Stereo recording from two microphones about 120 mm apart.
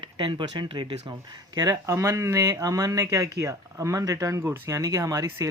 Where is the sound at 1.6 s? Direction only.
25° right (ahead or behind).